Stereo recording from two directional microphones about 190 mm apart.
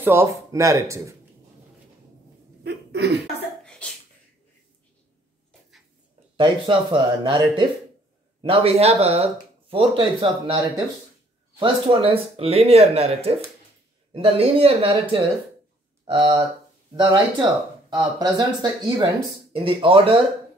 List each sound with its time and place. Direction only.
0.0 s speech: 15° right (ahead or behind)
2.6 s a sound: 60° right (ahead or behind)
3.8 s sneeze: 5° left (ahead or behind)
6.3 s speech: 25° right (ahead or behind)
11.6 s speech: 30° right (ahead or behind)